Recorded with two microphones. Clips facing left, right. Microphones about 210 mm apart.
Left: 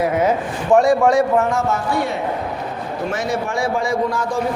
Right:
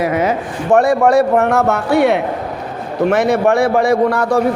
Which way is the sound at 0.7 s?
60° right (ahead or behind).